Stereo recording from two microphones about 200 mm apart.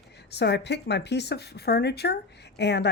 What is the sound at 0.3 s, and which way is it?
Speech, 55° left (ahead or behind).